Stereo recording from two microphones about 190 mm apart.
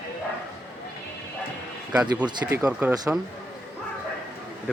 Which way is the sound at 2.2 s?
20° right (ahead or behind).